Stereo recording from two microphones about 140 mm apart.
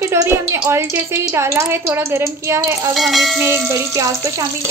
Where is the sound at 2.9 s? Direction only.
Centre (ahead or behind).